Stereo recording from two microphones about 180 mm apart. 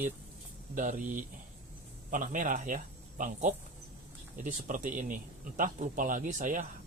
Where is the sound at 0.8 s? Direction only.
45° right (ahead or behind).